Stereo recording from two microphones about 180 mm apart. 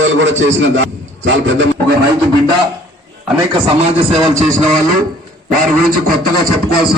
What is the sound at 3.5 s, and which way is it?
Speech, 30° right (ahead or behind).